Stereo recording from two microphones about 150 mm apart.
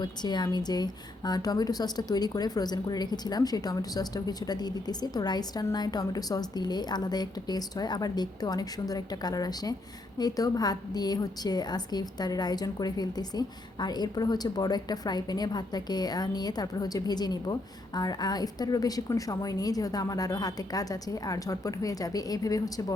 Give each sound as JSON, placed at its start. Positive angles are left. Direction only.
{"t": 0.0, "sound": "a woman's voice", "side_deg": 30}